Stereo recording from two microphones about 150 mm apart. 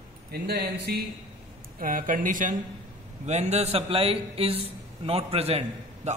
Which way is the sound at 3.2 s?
50° right (ahead or behind).